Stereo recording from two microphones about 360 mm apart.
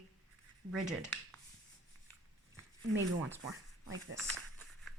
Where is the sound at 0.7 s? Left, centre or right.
Centre.